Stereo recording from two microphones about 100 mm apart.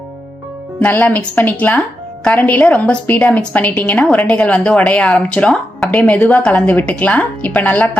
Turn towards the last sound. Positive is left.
turn(degrees=15)  # may be behind; listen again after turning